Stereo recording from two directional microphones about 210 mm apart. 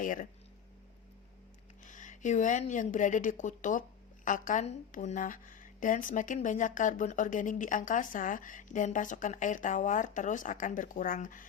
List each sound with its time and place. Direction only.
0.0 s a woman's voice: 40° left (ahead or behind)
1.8 s a woman's voice: 35° left (ahead or behind)